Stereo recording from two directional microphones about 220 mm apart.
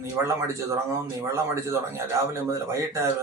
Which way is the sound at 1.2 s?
10° right (ahead or behind).